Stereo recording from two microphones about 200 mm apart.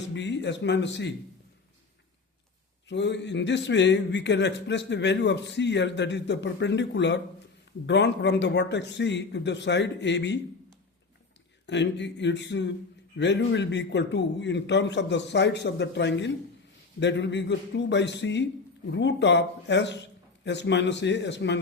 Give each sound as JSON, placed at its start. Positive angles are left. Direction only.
{"t": 0.1, "sound": "a man's voice", "side_deg": 65}
{"t": 2.9, "sound": "a man's voice", "side_deg": 60}
{"t": 11.6, "sound": "a man's voice", "side_deg": 60}